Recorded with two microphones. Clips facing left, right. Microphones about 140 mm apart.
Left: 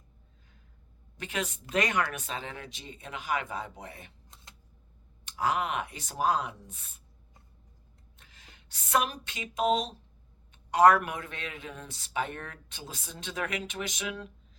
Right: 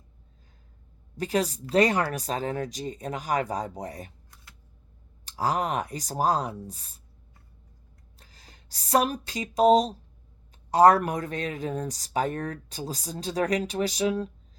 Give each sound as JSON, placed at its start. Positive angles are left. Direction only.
{"t": 1.1, "sound": "speech", "side_deg": -35}
{"t": 5.2, "sound": "speech", "side_deg": -35}
{"t": 8.2, "sound": "speech", "side_deg": -35}